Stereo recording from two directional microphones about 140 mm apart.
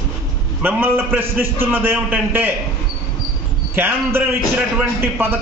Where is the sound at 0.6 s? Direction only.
15° right (ahead or behind).